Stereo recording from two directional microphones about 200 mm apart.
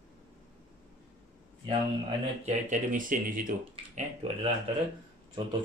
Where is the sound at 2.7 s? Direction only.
45° right (ahead or behind).